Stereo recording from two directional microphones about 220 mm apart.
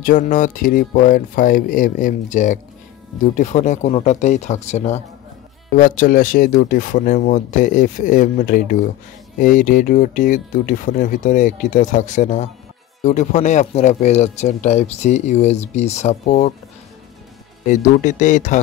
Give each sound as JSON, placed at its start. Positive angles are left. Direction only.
{"t": 0.0, "sound": "speech", "side_deg": 35}
{"t": 17.6, "sound": "speech", "side_deg": 35}